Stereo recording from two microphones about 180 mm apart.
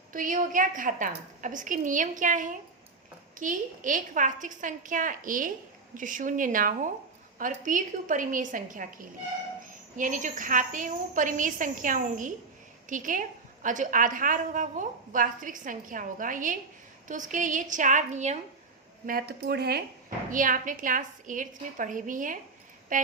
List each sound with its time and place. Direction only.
0.1 s a woman's voice: 50° right (ahead or behind)
10.0 s a woman's voice: 45° right (ahead or behind)
19.0 s a woman's voice: 55° right (ahead or behind)